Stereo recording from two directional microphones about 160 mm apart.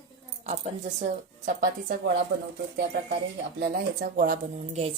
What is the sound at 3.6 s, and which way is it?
Speech, 65° right (ahead or behind).